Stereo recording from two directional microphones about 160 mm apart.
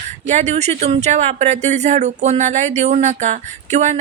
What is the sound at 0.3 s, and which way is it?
Speech, 45° right (ahead or behind).